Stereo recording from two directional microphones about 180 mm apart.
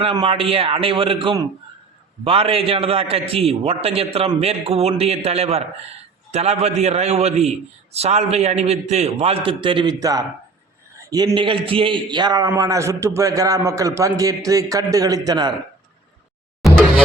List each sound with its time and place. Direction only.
0.0 s a man's voice: 30° right (ahead or behind)